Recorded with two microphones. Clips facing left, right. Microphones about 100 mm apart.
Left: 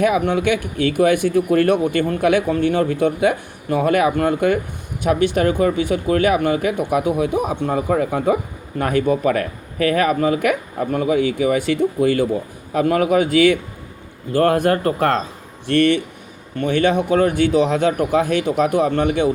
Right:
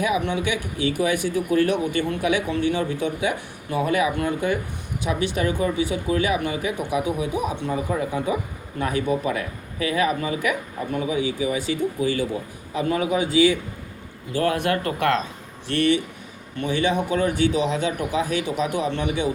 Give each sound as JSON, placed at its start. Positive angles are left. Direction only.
{"t": 0.0, "sound": "speech", "side_deg": 55}
{"t": 7.7, "sound": "speech", "side_deg": 65}
{"t": 14.3, "sound": "speech", "side_deg": 45}
{"t": 15.6, "sound": "speech", "side_deg": 55}